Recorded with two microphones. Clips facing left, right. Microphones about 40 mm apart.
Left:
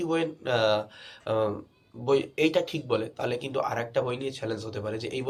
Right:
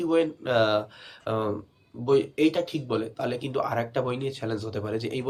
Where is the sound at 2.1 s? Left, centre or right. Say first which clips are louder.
Right 2 dB; left.